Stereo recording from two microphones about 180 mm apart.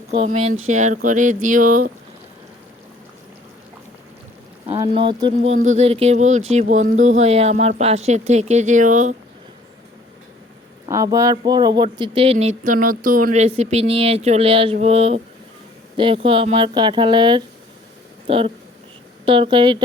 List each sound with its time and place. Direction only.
0.3 s speech: 35° right (ahead or behind)
4.8 s speech: 25° right (ahead or behind); by 9.1 s 45° right (ahead or behind)
10.8 s speech: 20° right (ahead or behind)